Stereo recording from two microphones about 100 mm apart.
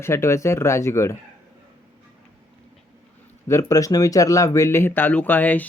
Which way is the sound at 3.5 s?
30° left (ahead or behind).